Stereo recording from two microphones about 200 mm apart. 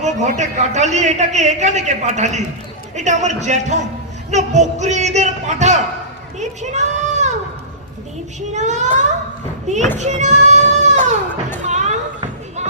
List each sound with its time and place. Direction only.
0.0 s a man's voice: 35° right (ahead or behind)
8.4 s a man's voice: 35° right (ahead or behind)
10.0 s child singing: 35° right (ahead or behind)
11.7 s a sound: 35° right (ahead or behind)